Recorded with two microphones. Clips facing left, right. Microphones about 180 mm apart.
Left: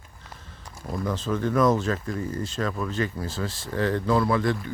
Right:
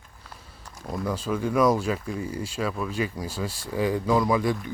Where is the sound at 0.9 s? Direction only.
10° right (ahead or behind).